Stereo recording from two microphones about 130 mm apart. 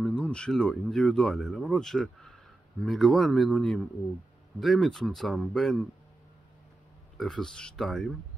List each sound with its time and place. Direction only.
0.0 s speech: 10° left (ahead or behind)
7.2 s speech: centre (ahead or behind)